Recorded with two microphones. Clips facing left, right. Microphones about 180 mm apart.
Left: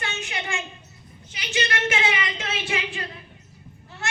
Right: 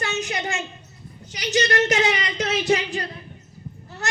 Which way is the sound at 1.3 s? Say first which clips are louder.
Right 6 dB; 40° right (ahead or behind).